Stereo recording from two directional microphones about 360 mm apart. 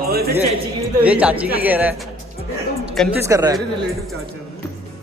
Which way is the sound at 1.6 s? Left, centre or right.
Centre.